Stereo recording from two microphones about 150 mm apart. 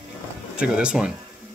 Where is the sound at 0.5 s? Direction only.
5° right (ahead or behind).